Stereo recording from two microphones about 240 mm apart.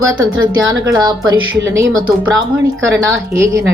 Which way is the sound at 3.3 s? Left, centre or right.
Centre.